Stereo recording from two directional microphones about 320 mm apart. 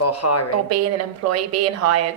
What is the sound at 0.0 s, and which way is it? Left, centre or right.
Speech, left.